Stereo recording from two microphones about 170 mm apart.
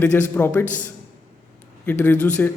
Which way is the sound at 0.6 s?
50° left (ahead or behind).